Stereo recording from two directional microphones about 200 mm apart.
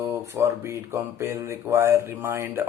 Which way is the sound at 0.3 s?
15° right (ahead or behind).